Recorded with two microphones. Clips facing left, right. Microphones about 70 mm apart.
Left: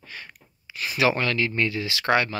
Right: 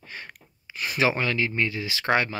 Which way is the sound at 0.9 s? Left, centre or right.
Centre.